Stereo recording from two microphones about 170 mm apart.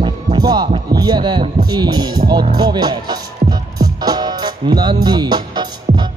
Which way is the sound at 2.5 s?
25° right (ahead or behind).